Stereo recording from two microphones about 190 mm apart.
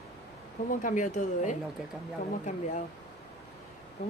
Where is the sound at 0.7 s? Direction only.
45° left (ahead or behind).